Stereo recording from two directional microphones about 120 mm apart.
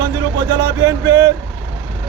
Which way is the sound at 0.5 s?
30° right (ahead or behind).